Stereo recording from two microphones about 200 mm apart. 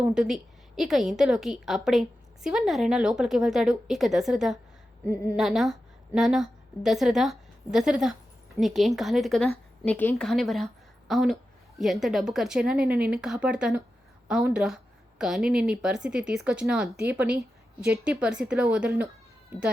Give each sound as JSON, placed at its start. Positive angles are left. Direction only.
{"t": 0.0, "sound": "a woman's voice", "side_deg": -5}